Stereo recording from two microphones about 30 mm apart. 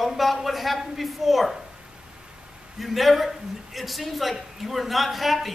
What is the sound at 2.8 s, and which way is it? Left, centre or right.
A woman's voice, centre.